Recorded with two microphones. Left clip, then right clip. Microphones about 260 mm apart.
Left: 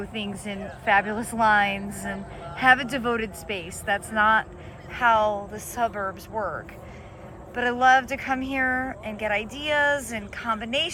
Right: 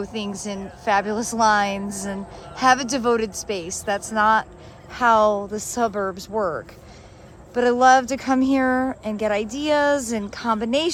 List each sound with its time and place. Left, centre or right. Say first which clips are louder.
0.0 s speech: right 4 dB; centre
7.5 s speech: right 4 dB; centre